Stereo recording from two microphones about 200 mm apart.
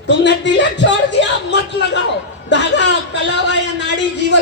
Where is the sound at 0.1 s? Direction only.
60° left (ahead or behind).